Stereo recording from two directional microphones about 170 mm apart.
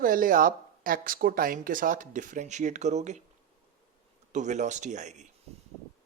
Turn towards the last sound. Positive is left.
turn(degrees=-45)  # may be behind; listen again after turning